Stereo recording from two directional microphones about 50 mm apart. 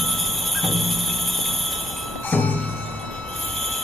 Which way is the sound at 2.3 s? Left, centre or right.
Left.